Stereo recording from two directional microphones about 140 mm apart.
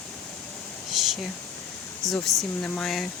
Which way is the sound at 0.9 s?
Centre (ahead or behind).